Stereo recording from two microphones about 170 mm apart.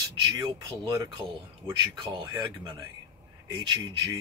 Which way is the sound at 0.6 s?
20° right (ahead or behind).